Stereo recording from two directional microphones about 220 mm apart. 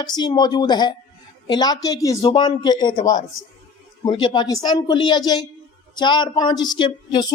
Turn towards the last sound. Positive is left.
turn(degrees=20)  # may be behind; listen again after turning